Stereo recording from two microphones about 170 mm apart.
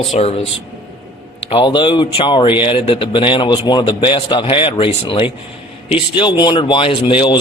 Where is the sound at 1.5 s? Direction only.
30° left (ahead or behind).